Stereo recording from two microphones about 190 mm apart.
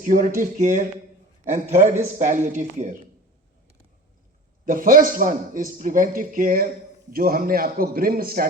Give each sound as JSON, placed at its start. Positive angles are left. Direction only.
{"t": 0.0, "sound": "speech", "side_deg": -45}
{"t": 4.6, "sound": "speech", "side_deg": -45}